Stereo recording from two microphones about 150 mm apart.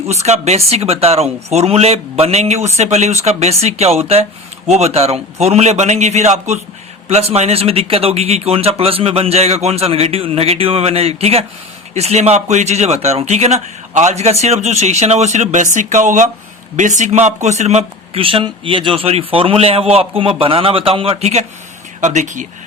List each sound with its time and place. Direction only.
0.1 s speech: 45° right (ahead or behind)